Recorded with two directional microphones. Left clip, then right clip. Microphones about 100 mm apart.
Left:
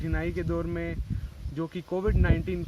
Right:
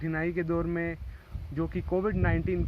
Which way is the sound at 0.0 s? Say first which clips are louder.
Right 1 dB; 45° left (ahead or behind).